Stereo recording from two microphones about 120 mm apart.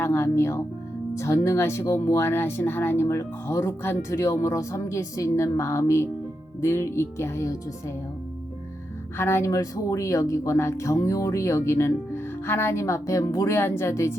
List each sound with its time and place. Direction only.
0.0 s speech: 20° left (ahead or behind)
9.1 s speech: 20° left (ahead or behind)